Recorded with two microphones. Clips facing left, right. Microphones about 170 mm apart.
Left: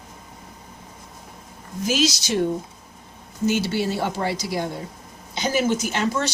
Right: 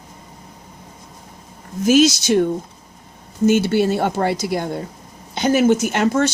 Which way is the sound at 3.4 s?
55° right (ahead or behind).